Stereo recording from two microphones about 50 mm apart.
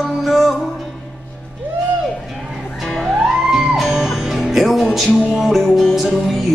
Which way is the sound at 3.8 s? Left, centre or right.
Centre.